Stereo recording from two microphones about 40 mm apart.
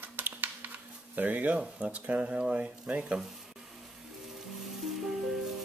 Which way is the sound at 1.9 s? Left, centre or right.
Right.